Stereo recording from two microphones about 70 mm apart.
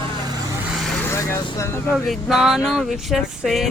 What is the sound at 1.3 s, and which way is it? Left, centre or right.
Speech, left.